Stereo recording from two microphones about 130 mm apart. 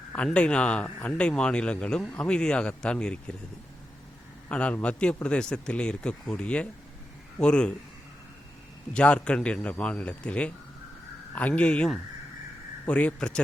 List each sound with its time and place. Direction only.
0.3 s a man's voice: 10° left (ahead or behind)
4.4 s a man's voice: 10° left (ahead or behind)
8.9 s a man's voice: 10° left (ahead or behind)